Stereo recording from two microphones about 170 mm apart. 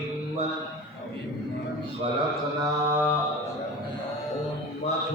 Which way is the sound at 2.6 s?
15° right (ahead or behind).